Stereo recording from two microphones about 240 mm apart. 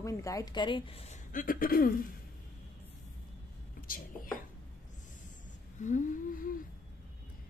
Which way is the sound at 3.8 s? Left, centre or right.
Left.